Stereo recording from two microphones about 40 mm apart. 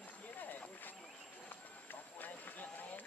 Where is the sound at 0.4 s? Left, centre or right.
Left.